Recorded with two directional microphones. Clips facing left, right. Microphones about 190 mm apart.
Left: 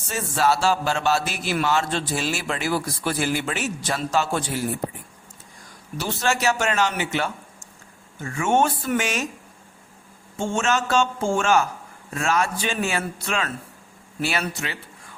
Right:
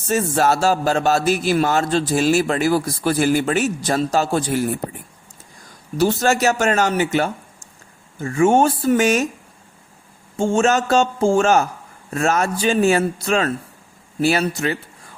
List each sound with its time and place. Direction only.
0.1 s a man's voice: 45° right (ahead or behind)
6.0 s a man's voice: 40° right (ahead or behind)
10.3 s a man's voice: 35° right (ahead or behind)